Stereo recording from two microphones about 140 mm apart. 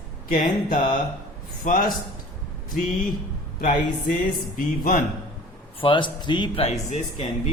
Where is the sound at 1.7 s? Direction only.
75° left (ahead or behind).